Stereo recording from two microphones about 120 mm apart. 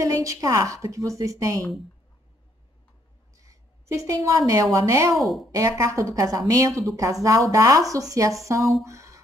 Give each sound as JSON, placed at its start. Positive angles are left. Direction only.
{"t": 0.0, "sound": "speech", "side_deg": -25}
{"t": 3.4, "sound": "a woman's voice", "side_deg": -25}
{"t": 5.1, "sound": "speech", "side_deg": 0}
{"t": 5.6, "sound": "speech", "side_deg": -30}
{"t": 8.8, "sound": "a sound", "side_deg": -25}